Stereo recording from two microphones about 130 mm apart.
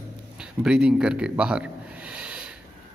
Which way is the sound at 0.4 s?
5° right (ahead or behind).